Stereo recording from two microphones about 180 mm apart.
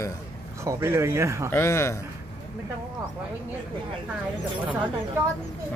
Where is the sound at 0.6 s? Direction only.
15° right (ahead or behind).